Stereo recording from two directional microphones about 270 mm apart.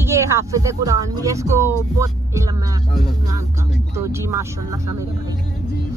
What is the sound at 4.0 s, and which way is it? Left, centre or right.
Speech, centre.